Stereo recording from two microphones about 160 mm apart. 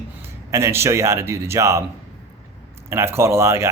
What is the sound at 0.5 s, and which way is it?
Speech, 15° right (ahead or behind).